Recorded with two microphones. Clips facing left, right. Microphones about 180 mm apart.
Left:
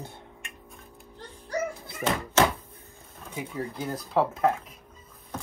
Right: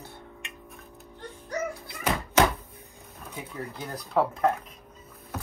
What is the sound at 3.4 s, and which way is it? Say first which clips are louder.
Speech: left 4 dB; 5° left (ahead or behind).